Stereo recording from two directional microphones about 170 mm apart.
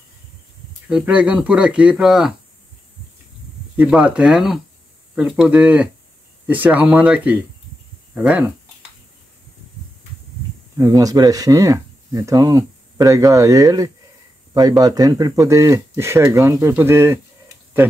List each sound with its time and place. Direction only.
0.8 s speech: 5° right (ahead or behind)
3.7 s speech: 5° right (ahead or behind)
10.8 s speech: 20° right (ahead or behind)